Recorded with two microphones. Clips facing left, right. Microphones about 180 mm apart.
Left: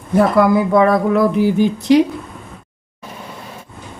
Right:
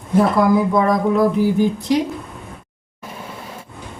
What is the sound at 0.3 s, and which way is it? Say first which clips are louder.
A woman's voice: left 3 dB; 65° left (ahead or behind).